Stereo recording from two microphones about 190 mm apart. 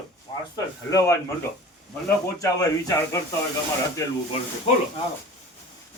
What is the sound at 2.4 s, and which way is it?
Speech, 15° left (ahead or behind).